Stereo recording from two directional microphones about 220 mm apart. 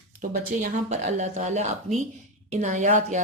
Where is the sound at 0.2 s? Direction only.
35° right (ahead or behind).